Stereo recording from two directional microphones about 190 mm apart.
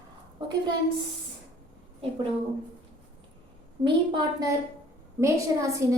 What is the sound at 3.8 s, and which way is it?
A woman's voice, 25° right (ahead or behind).